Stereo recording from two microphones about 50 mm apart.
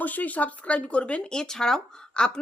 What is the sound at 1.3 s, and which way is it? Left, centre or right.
Speech, centre.